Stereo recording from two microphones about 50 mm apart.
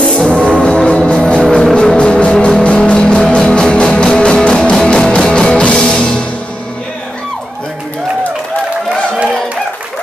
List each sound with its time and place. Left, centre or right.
0.0 s music: centre